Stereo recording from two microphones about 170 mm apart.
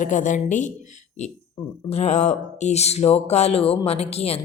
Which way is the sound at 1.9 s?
40° left (ahead or behind).